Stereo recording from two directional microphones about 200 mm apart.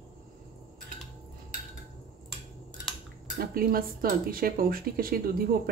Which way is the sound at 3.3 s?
50° right (ahead or behind).